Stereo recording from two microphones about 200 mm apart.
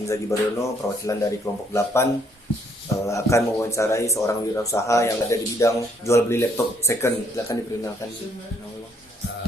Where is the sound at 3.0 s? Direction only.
15° left (ahead or behind).